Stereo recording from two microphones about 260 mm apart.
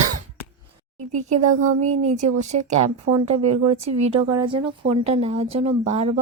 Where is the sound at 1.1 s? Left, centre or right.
Right.